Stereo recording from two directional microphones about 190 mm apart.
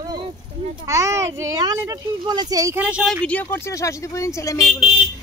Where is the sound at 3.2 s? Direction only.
10° left (ahead or behind).